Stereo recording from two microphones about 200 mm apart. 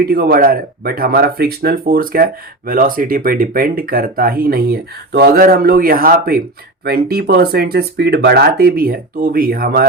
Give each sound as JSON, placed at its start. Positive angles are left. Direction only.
{"t": 0.0, "sound": "speech", "side_deg": -50}